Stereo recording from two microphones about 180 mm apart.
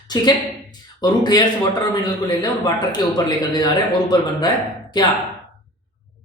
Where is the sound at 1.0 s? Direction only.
25° left (ahead or behind).